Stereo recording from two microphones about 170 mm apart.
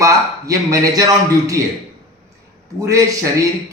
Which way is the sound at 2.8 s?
20° right (ahead or behind).